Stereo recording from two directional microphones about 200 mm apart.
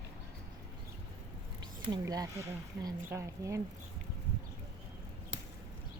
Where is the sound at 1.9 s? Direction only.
20° right (ahead or behind).